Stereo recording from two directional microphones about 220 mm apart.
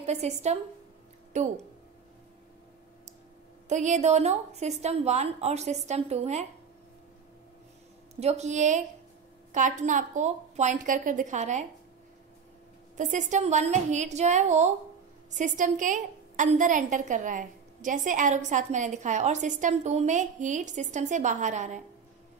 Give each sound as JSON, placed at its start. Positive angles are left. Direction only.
{"t": 0.0, "sound": "a woman's voice", "side_deg": -30}
{"t": 3.6, "sound": "a woman's voice", "side_deg": -35}
{"t": 8.2, "sound": "a woman's voice", "side_deg": -30}
{"t": 12.9, "sound": "a woman's voice", "side_deg": -35}